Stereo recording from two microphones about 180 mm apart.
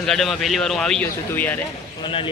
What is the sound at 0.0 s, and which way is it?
A man's voice, 5° left (ahead or behind).